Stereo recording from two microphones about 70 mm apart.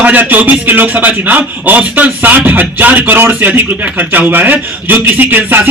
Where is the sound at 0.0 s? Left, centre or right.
Right.